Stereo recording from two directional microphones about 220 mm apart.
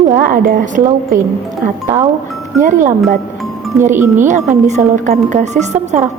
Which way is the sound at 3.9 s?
10° right (ahead or behind).